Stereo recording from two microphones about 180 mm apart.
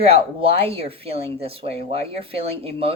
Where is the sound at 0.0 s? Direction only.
35° right (ahead or behind).